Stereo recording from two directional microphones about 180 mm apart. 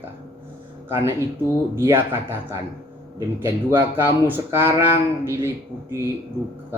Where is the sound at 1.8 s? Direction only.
15° right (ahead or behind).